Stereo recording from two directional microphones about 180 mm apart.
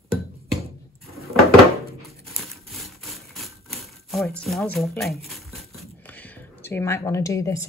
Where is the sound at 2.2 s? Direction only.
Centre (ahead or behind).